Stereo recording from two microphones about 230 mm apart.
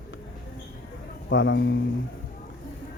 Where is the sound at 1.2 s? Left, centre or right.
Left.